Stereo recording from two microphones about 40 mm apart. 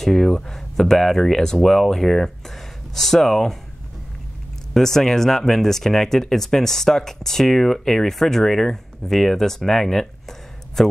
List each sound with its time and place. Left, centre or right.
0.0 s speech: centre
4.7 s speech: centre